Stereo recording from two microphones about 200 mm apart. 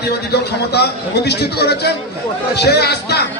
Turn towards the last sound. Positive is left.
turn(degrees=55)  # may be behind; listen again after turning